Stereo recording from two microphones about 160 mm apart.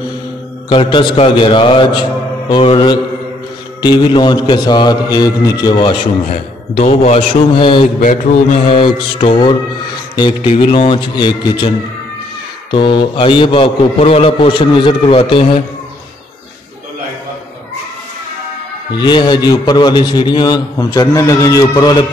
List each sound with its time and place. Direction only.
0.7 s a man's voice: 30° left (ahead or behind)
6.8 s a man's voice: 40° left (ahead or behind)
12.7 s a man's voice: 30° left (ahead or behind)
18.9 s a man's voice: 30° left (ahead or behind)